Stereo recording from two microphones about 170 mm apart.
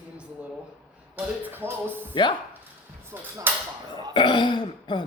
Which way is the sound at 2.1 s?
30° left (ahead or behind).